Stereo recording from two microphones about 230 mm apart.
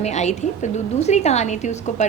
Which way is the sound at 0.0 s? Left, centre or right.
Left.